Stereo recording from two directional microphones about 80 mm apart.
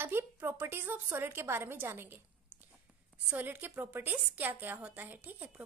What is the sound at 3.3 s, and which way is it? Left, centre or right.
A woman's voice, right.